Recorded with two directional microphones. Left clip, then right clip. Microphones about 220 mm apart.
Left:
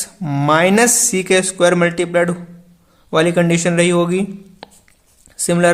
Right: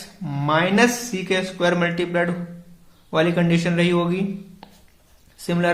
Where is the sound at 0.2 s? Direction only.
40° left (ahead or behind).